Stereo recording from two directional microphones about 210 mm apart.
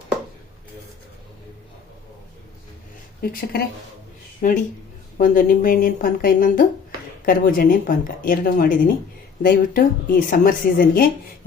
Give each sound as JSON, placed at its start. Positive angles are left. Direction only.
{"t": 3.2, "sound": "a woman's voice", "side_deg": 45}